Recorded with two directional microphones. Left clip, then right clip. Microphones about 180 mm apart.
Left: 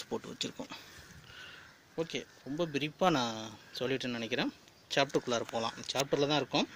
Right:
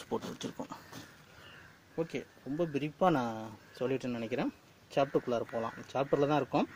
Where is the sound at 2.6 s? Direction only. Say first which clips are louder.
Right 1 dB; 5° left (ahead or behind).